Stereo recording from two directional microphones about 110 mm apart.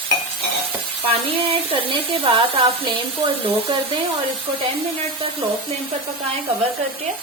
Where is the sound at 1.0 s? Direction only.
55° right (ahead or behind).